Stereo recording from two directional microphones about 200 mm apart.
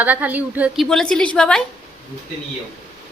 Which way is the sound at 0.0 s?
10° right (ahead or behind).